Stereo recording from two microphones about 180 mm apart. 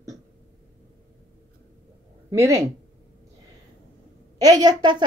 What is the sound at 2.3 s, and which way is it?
Speech, 15° right (ahead or behind).